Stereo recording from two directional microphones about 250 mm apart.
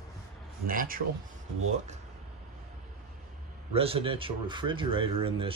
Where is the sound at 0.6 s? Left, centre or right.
Right.